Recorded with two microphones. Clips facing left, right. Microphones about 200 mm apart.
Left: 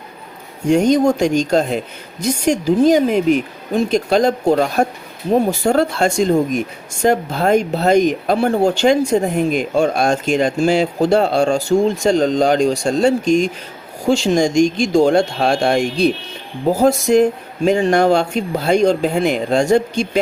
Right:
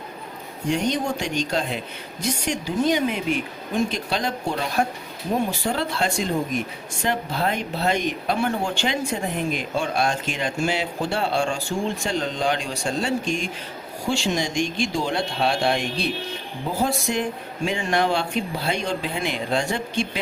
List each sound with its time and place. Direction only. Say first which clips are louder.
0.7 s speech: left 11 dB; 45° left (ahead or behind)